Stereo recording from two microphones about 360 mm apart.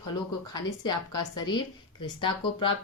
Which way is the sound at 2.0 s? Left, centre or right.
Centre.